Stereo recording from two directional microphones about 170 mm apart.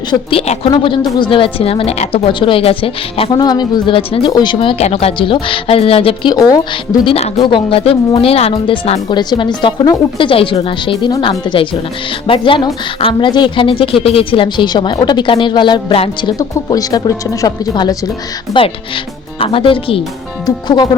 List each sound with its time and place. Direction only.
0.1 s speech: 30° left (ahead or behind)
6.3 s a woman's voice: 20° left (ahead or behind)
19.4 s speech: 30° left (ahead or behind)